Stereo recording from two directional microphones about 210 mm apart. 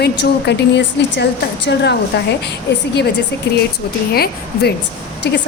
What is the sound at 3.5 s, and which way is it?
A woman's voice, 50° left (ahead or behind).